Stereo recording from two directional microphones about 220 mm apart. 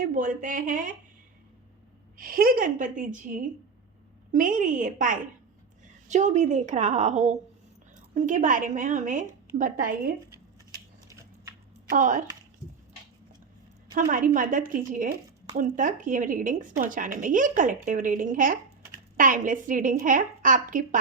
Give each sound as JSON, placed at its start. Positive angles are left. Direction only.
{"t": 0.0, "sound": "speech", "side_deg": -35}
{"t": 2.1, "sound": "speech", "side_deg": -40}
{"t": 11.9, "sound": "speech", "side_deg": -35}
{"t": 13.9, "sound": "speech", "side_deg": -40}